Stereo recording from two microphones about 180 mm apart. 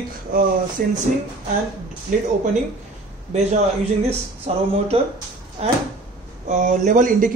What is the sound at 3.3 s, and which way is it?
A man's voice, 35° right (ahead or behind).